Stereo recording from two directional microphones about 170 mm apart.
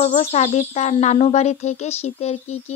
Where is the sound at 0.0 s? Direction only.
40° left (ahead or behind).